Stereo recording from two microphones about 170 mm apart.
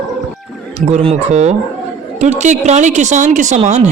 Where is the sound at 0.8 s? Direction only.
40° right (ahead or behind).